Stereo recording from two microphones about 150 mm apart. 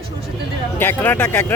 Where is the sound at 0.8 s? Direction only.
15° left (ahead or behind).